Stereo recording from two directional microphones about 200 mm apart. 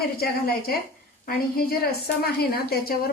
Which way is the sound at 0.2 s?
50° left (ahead or behind).